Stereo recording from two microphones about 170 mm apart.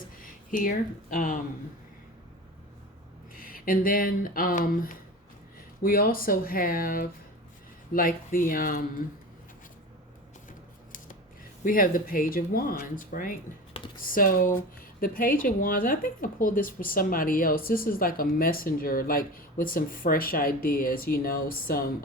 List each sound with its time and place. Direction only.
0.2 s a sound: 55° left (ahead or behind)
1.1 s speech: 50° left (ahead or behind)
3.3 s a woman's voice: 55° left (ahead or behind)
11.6 s a woman's voice: 55° left (ahead or behind)